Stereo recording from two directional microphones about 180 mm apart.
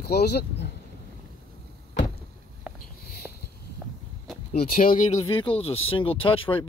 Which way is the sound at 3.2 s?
5° right (ahead or behind).